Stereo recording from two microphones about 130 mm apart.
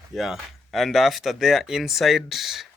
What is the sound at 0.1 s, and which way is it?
Speech, centre (ahead or behind).